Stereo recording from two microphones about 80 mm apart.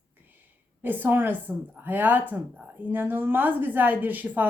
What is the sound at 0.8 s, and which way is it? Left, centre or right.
A woman's voice, right.